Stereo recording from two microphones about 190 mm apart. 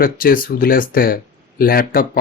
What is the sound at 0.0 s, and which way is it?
Speech, 50° left (ahead or behind).